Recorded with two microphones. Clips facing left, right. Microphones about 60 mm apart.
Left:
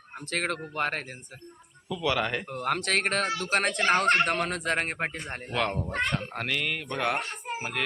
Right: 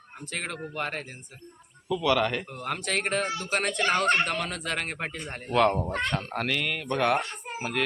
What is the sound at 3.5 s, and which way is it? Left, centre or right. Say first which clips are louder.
Speech: left 2 dB; left.